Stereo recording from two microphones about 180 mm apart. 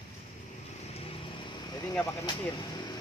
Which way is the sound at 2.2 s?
20° left (ahead or behind).